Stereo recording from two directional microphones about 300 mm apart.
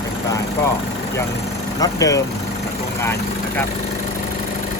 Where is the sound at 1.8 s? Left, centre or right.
Centre.